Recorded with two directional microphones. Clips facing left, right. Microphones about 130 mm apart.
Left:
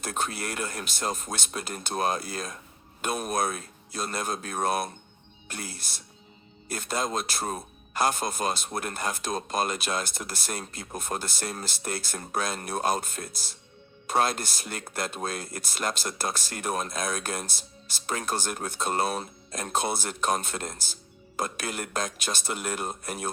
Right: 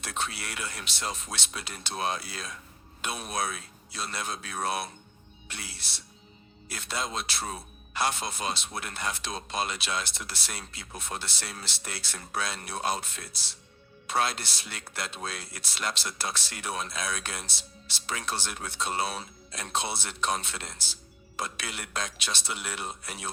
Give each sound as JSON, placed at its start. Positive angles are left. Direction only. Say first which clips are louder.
{"t": 0.0, "sound": "speech", "louder": "left 4 dB", "side_deg": 45}